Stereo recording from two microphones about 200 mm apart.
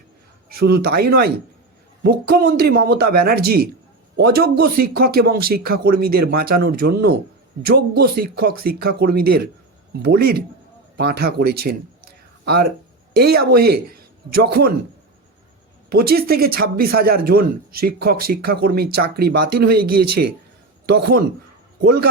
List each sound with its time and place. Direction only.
0.4 s a man's voice: 50° right (ahead or behind)
15.9 s a man's voice: 50° right (ahead or behind)